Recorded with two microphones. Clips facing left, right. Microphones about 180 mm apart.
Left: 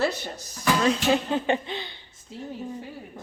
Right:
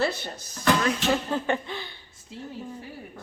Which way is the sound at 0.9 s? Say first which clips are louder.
Left 3 dB; 20° left (ahead or behind).